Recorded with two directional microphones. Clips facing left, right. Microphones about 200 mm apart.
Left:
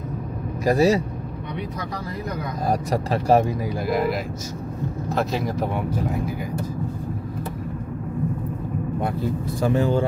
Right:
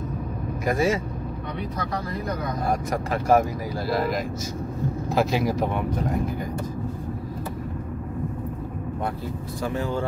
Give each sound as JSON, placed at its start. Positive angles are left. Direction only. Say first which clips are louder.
{"t": 0.7, "sound": "speech", "louder": "left 5 dB", "side_deg": 35}
{"t": 2.7, "sound": "speech", "louder": "left 5 dB", "side_deg": 35}
{"t": 3.8, "sound": "speech", "louder": "left 2 dB", "side_deg": 15}
{"t": 5.1, "sound": "speech", "louder": "right 2 dB", "side_deg": -5}
{"t": 9.6, "sound": "speech", "louder": "left 6 dB", "side_deg": 25}